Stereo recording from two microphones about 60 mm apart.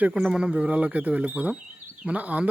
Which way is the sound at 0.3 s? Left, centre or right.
Centre.